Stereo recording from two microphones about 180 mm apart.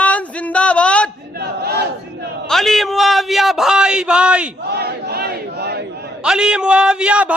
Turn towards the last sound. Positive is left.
turn(degrees=-5)  # may be behind; listen again after turning